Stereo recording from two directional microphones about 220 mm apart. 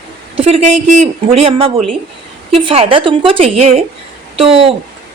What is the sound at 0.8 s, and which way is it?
A woman's voice, 35° right (ahead or behind).